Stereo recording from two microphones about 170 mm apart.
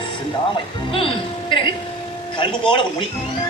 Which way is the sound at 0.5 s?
30° left (ahead or behind).